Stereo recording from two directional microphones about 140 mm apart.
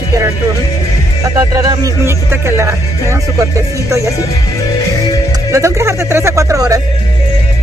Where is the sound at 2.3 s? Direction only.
15° right (ahead or behind).